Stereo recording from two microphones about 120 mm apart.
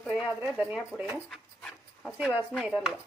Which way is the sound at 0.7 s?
10° right (ahead or behind).